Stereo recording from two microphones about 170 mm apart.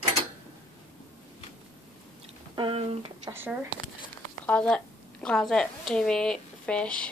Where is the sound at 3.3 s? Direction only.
15° right (ahead or behind).